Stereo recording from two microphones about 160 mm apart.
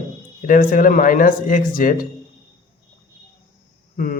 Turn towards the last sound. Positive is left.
turn(degrees=60)  # may be behind; listen again after turning